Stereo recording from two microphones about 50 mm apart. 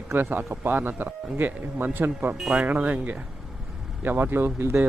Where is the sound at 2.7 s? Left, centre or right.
Right.